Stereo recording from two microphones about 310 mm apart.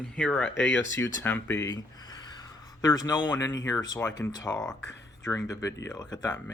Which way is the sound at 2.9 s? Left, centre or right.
Centre.